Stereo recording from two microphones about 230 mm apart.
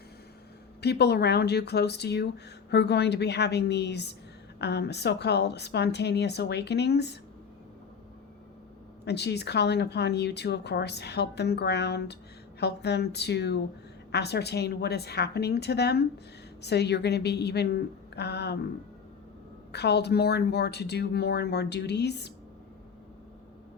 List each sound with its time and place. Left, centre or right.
0.8 s a woman's voice: left
9.0 s a woman's voice: left
19.7 s a woman's voice: left